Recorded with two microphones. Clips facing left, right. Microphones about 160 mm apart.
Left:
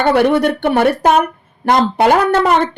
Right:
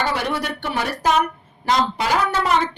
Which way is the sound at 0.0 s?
60° left (ahead or behind).